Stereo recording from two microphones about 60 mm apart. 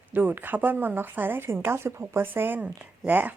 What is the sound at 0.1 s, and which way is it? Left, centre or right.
A woman's voice, right.